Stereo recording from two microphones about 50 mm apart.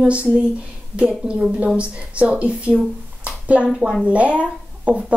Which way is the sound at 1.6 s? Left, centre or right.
Right.